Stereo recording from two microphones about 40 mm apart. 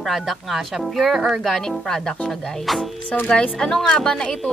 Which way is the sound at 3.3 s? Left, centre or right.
Centre.